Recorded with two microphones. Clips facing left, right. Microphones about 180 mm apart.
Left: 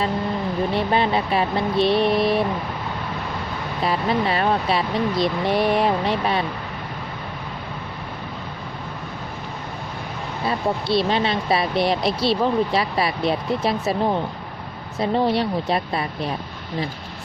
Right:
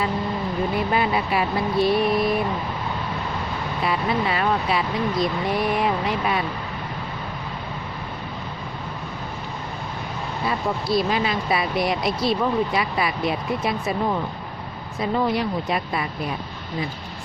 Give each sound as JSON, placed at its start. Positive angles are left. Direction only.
{"t": 0.7, "sound": "a sound", "side_deg": 30}
{"t": 3.8, "sound": "speech", "side_deg": 30}
{"t": 10.4, "sound": "speech", "side_deg": 30}